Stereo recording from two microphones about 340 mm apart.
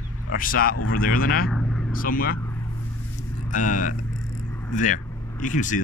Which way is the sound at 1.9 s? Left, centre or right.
Left.